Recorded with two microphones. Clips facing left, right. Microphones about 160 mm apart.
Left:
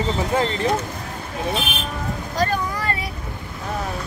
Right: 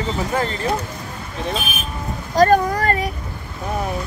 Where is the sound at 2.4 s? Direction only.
45° right (ahead or behind).